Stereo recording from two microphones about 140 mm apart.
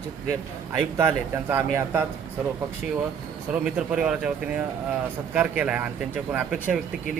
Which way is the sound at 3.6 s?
5° right (ahead or behind).